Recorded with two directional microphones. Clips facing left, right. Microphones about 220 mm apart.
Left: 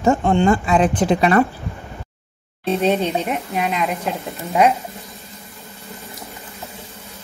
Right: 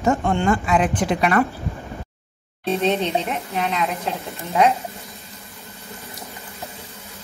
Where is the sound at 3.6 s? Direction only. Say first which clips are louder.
Left 1 dB; 10° left (ahead or behind).